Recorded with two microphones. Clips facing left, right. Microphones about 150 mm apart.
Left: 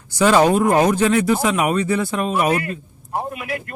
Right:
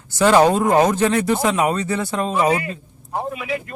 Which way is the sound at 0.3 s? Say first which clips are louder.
Even; 20° right (ahead or behind).